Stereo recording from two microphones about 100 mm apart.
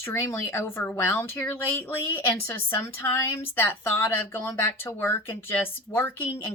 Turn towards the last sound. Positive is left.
turn(degrees=20)  # may be behind; listen again after turning